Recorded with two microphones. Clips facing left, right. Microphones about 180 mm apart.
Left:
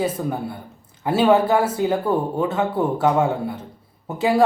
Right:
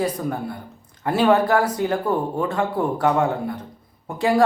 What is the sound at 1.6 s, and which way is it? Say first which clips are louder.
Speech: left 1 dB; 25° left (ahead or behind).